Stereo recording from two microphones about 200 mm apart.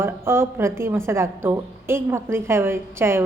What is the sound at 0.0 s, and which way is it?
A woman's voice, 10° right (ahead or behind).